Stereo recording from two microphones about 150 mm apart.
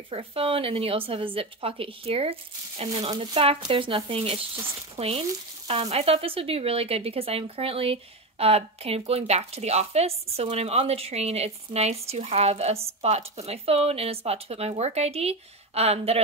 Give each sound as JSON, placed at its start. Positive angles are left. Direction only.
{"t": 0.1, "sound": "speech", "side_deg": -40}